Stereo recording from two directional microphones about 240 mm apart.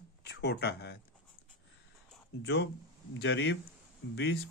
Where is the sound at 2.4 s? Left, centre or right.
Left.